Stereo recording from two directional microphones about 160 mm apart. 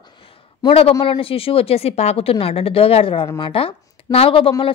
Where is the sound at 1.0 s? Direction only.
35° left (ahead or behind).